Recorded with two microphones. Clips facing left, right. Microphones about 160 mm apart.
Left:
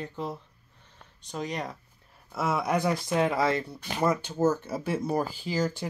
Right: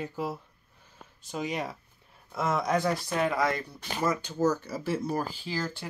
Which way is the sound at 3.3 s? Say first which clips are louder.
Left 2 dB; 25° left (ahead or behind).